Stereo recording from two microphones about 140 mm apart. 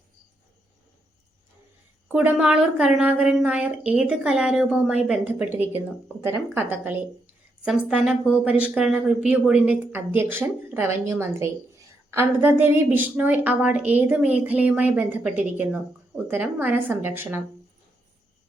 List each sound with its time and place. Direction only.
2.0 s a woman's voice: 10° right (ahead or behind)